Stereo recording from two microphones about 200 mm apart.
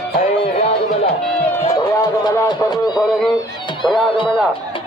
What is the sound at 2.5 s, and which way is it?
Speech, 20° left (ahead or behind).